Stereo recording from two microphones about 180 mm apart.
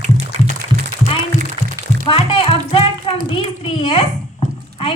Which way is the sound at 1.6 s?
25° right (ahead or behind).